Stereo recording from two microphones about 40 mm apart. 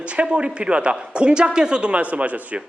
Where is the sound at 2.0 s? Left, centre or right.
Right.